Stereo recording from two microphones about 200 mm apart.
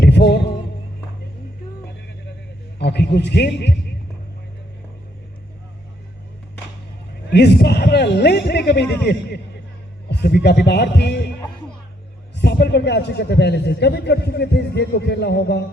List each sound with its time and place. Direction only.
0.0 s music: 60° left (ahead or behind)
2.7 s a man's voice: 55° left (ahead or behind)
7.3 s a man's voice: 55° left (ahead or behind)
12.4 s a man's voice: 55° left (ahead or behind)